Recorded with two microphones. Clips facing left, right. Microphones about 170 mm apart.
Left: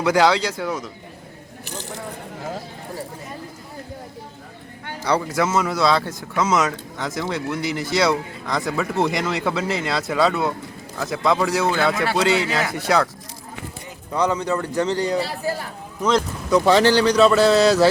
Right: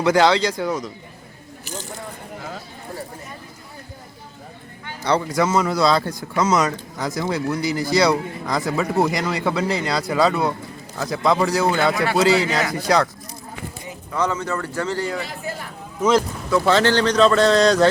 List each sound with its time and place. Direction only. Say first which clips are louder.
0.0 s speech: right 1 dB; 10° left (ahead or behind)
5.0 s speech: right 1 dB; 5° left (ahead or behind)
14.1 s speech: left 2 dB; 15° left (ahead or behind)
15.2 s speech: left 5 dB; 35° left (ahead or behind)
16.0 s speech: right 2 dB; 5° right (ahead or behind)
16.5 s speech: left 2 dB; 15° left (ahead or behind)